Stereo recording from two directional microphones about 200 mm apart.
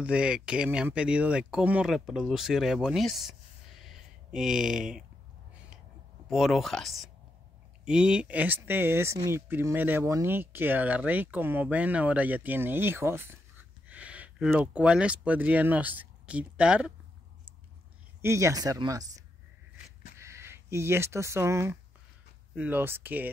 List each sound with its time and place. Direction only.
0.0 s speech: 5° right (ahead or behind)
6.2 s speech: centre (ahead or behind)
18.2 s speech: 15° right (ahead or behind)